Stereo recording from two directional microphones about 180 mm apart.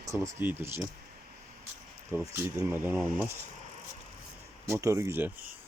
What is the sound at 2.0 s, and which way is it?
Speech, 15° right (ahead or behind).